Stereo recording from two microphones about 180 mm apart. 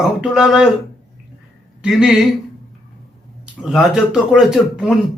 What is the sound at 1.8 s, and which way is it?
Speech, 5° right (ahead or behind).